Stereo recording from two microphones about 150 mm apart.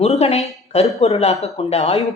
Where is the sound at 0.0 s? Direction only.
45° left (ahead or behind).